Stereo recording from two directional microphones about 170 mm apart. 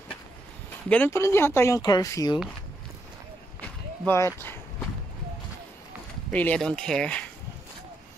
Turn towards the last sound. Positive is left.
turn(degrees=5)  # may be behind; listen again after turning